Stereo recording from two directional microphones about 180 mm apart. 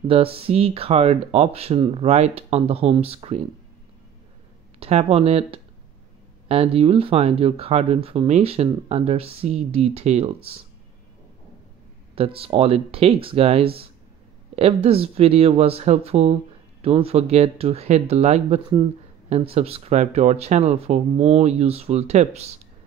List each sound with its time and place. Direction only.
0.1 s speech: 30° right (ahead or behind)
4.7 s speech: 35° right (ahead or behind)
12.2 s speech: 30° right (ahead or behind)